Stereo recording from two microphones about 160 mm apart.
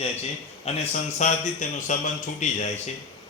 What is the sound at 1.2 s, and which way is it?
A man's voice, 50° left (ahead or behind).